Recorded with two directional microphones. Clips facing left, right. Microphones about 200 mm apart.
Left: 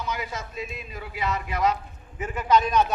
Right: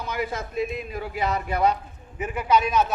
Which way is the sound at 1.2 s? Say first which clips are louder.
Right 2 dB; 35° right (ahead or behind).